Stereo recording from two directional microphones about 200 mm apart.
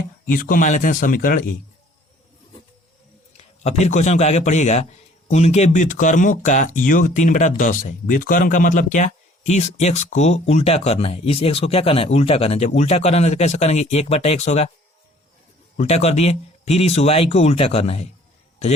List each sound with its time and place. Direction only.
0.3 s speech: 45° left (ahead or behind)
3.6 s speech: 35° left (ahead or behind)
15.8 s speech: 30° left (ahead or behind)